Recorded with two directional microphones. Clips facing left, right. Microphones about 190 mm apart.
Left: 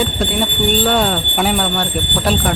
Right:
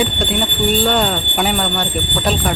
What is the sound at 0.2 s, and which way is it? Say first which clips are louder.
Speech: left 1 dB; centre (ahead or behind).